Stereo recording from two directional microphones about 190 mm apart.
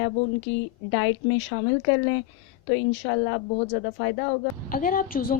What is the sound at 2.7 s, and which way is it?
A woman's voice, 70° left (ahead or behind).